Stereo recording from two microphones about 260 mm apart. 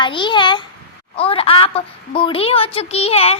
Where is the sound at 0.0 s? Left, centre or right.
Centre.